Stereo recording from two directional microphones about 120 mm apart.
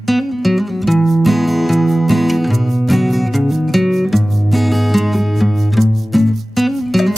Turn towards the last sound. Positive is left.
turn(degrees=0)  # may be behind; listen again after turning